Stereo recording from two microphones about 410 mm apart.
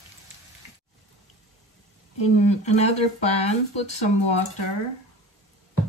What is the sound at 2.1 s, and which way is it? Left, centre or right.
Speech, left.